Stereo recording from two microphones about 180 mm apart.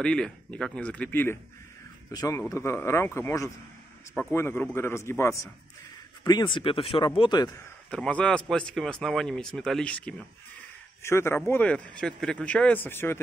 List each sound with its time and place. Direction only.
0.0 s speech: 5° left (ahead or behind); by 7.6 s 20° left (ahead or behind)
7.9 s speech: 5° left (ahead or behind)